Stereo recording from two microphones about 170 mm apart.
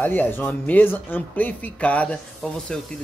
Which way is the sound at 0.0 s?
10° left (ahead or behind).